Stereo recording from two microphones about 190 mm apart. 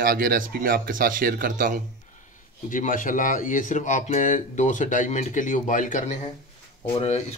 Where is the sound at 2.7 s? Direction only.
45° left (ahead or behind).